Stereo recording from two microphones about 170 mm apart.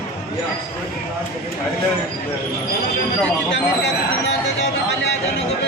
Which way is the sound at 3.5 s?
90° left.